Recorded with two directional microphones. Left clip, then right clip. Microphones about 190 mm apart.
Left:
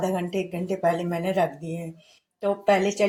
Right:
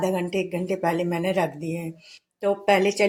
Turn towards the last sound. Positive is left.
turn(degrees=-30)  # may be behind; listen again after turning